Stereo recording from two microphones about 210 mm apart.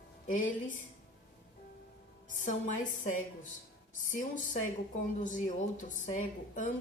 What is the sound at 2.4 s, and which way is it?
A woman's voice, 35° left (ahead or behind).